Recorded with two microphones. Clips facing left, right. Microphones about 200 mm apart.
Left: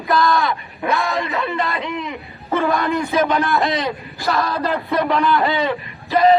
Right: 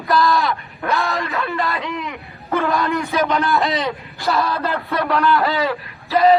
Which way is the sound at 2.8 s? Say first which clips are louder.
Left 1 dB; 15° left (ahead or behind).